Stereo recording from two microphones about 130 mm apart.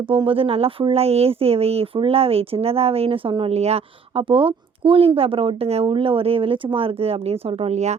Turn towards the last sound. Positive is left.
turn(degrees=-60)  # may be behind; listen again after turning